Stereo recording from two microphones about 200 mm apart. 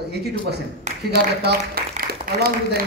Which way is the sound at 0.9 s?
35° right (ahead or behind).